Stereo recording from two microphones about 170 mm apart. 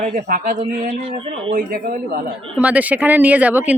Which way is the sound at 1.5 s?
55° right (ahead or behind).